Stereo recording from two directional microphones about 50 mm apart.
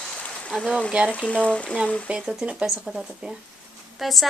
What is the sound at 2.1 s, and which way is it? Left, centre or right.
A woman's voice, centre.